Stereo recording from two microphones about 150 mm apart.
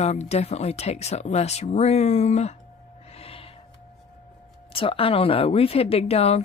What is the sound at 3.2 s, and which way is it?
Snort, 40° left (ahead or behind).